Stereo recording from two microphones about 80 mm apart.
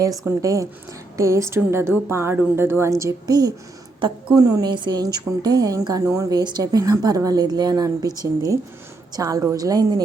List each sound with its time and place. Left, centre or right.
0.3 s a woman's voice: right
3.0 s speech: right
4.4 s speech: right
4.7 s speech: right